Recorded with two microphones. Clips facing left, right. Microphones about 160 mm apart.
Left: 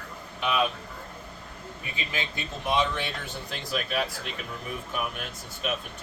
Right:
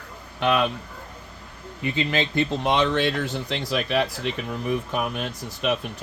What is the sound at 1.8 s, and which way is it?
Speech, 75° right (ahead or behind).